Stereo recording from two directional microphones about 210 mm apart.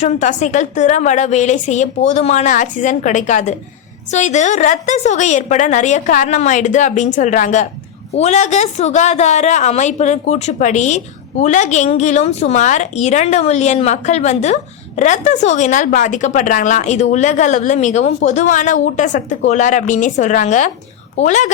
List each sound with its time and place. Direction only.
0.0 s a woman's voice: 35° left (ahead or behind)